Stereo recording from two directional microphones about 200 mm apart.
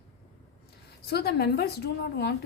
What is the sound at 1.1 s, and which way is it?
A woman's voice, 55° left (ahead or behind).